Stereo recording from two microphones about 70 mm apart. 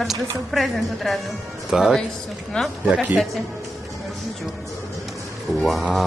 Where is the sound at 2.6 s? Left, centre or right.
Centre.